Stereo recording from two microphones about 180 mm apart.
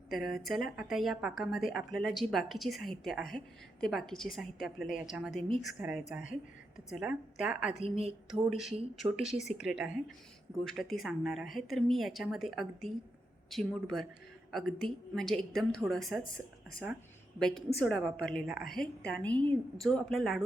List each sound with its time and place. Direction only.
0.2 s speech: centre (ahead or behind)
7.9 s a woman's voice: 35° right (ahead or behind)
8.3 s speech: centre (ahead or behind)
17.7 s speech: 5° left (ahead or behind)